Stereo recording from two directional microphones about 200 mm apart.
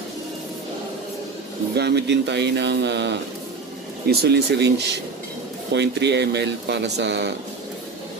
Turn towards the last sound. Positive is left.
turn(degrees=-60)  # may be behind; listen again after turning